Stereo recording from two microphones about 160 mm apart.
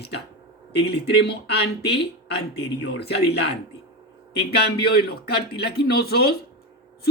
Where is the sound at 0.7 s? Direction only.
90° left.